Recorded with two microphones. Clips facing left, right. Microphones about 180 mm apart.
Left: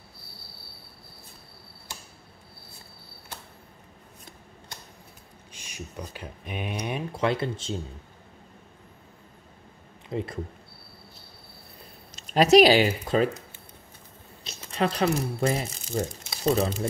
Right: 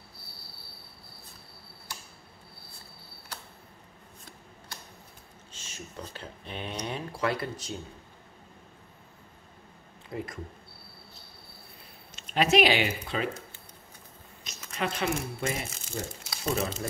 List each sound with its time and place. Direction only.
5.5 s speech: 15° left (ahead or behind)
10.0 s speech: 30° left (ahead or behind)
12.1 s speech: 40° left (ahead or behind)
14.4 s speech: 30° left (ahead or behind)
16.3 s crumpling: 35° left (ahead or behind)